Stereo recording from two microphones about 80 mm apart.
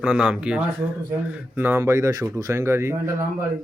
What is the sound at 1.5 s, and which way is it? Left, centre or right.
Speech, right.